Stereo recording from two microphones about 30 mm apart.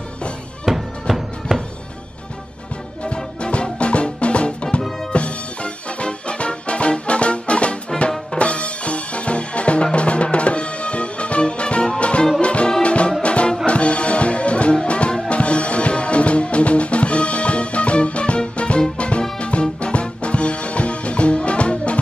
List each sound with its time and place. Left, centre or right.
0.7 s music: centre
3.8 s music: left
7.9 s music: centre
8.4 s music: left